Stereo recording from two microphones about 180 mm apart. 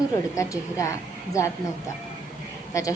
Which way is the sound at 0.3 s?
15° left (ahead or behind).